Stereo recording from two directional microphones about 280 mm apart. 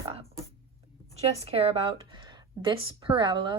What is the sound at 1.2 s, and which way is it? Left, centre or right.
A woman's voice, right.